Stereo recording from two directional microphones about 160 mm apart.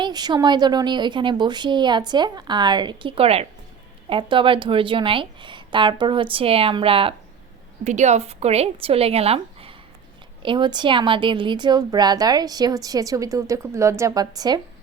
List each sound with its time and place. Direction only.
0.0 s a woman's voice: 25° right (ahead or behind)
7.9 s a woman's voice: 45° right (ahead or behind); by 14.6 s 25° right (ahead or behind)